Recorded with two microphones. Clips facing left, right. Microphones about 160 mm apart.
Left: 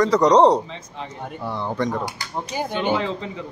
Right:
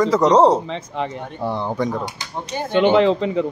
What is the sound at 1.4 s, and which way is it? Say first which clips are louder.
Speech: right 5 dB; 25° right (ahead or behind).